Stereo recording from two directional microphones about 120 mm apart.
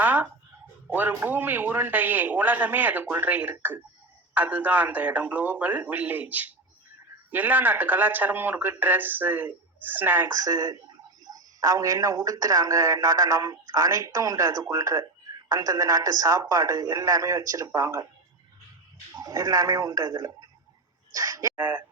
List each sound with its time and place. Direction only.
0.0 s a sound: 15° right (ahead or behind)
0.9 s speech: 15° right (ahead or behind)
10.4 s a man's voice: 30° right (ahead or behind)
19.2 s a man's voice: 30° right (ahead or behind)
21.1 s a sound: 30° right (ahead or behind)
21.5 s speech: 15° right (ahead or behind)